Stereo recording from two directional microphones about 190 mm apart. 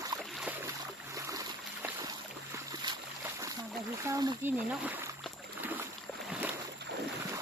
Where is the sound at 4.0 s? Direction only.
20° right (ahead or behind).